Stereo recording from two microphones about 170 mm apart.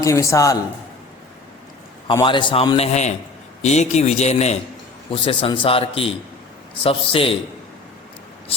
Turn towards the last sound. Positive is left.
turn(degrees=35)  # may be behind; listen again after turning